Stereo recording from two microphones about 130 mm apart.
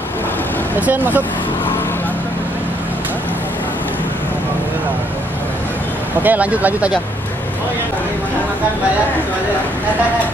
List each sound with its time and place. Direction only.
0.7 s speech: 10° right (ahead or behind)
6.2 s speech: 10° right (ahead or behind)